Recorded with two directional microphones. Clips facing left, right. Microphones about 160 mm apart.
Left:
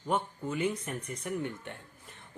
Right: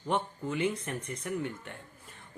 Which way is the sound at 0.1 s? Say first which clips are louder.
Even; 5° left (ahead or behind).